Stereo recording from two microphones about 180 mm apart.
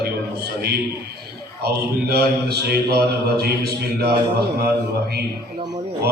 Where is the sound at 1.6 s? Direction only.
60° right (ahead or behind).